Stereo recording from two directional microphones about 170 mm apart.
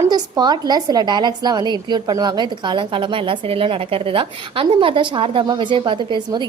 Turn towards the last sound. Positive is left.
turn(degrees=-25)  # may be behind; listen again after turning